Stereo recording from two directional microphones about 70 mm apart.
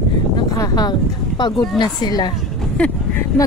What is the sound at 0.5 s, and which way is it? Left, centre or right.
Speech, left.